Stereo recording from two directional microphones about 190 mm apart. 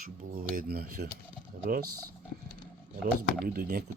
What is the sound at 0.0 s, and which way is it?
Speech, 50° right (ahead or behind).